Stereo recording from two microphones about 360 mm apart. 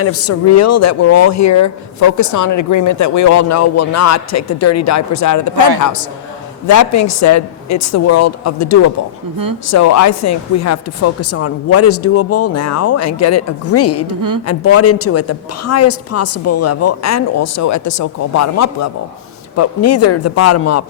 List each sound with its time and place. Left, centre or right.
0.0 s speech: left
14.2 s a woman's voice: right
14.4 s speech: left